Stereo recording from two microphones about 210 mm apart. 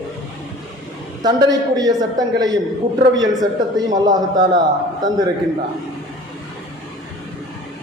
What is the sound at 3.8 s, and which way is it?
Speech, 20° right (ahead or behind).